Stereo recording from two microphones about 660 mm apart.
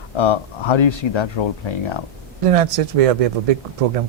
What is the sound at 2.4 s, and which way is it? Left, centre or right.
Speech, right.